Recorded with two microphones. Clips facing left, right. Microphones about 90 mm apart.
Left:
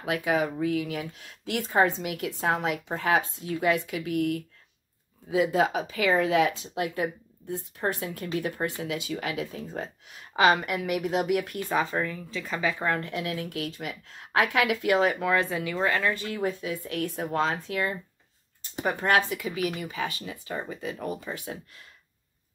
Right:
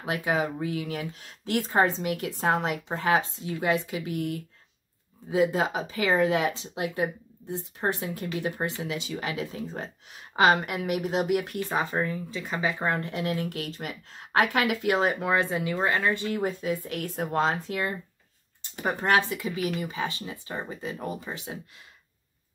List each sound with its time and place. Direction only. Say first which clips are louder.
0.0 s speech: left 1 dB; 30° right (ahead or behind)
3.0 s speech: right 1 dB; 25° right (ahead or behind)
16.4 s speech: right 1 dB; 45° right (ahead or behind)
18.9 s speech: even; 25° right (ahead or behind)